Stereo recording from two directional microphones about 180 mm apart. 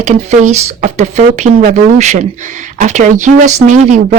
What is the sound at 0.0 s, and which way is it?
Speech, 40° right (ahead or behind).